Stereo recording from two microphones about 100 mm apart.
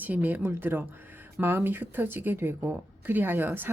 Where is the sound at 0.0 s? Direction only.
20° right (ahead or behind).